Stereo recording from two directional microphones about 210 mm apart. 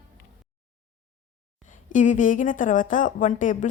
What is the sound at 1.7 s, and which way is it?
A woman's voice, 40° left (ahead or behind).